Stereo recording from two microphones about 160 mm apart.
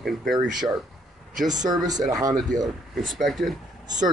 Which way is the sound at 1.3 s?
50° right (ahead or behind).